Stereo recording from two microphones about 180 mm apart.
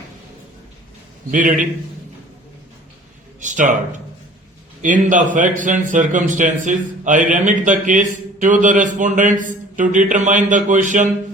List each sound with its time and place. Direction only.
1.3 s a man's voice: 45° right (ahead or behind)
3.4 s a man's voice: 45° right (ahead or behind)